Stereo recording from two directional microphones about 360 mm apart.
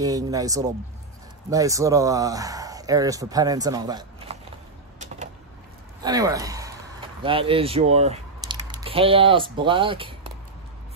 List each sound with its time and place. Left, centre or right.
0.0 s speech: centre
4.9 s vehicle: centre
6.0 s speech: centre